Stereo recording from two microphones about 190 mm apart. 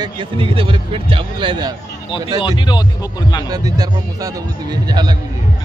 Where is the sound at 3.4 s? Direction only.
20° right (ahead or behind).